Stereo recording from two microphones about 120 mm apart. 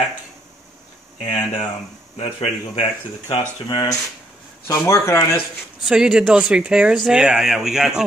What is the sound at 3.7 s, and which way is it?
Speech, 35° left (ahead or behind).